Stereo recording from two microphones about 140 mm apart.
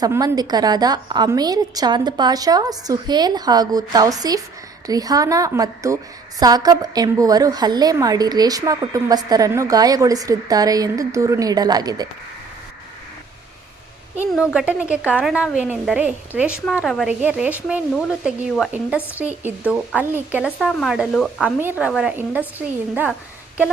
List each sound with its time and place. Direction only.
0.0 s a woman's voice: 20° right (ahead or behind)
14.2 s speech: 5° right (ahead or behind)